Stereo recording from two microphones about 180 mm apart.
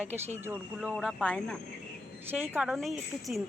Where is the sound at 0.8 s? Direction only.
Centre (ahead or behind).